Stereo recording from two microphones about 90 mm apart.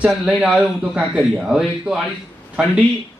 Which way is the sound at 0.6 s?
10° right (ahead or behind).